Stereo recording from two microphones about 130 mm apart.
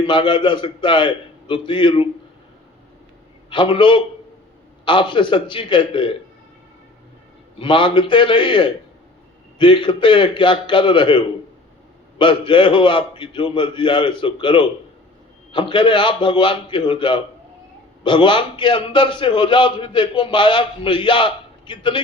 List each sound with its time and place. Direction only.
0.0 s a man's voice: 40° left (ahead or behind)
3.5 s a man's voice: 40° left (ahead or behind)
7.6 s a man's voice: 40° left (ahead or behind)
12.2 s a man's voice: 40° left (ahead or behind)